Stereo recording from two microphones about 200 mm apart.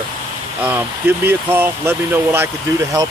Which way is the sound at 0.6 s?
10° right (ahead or behind).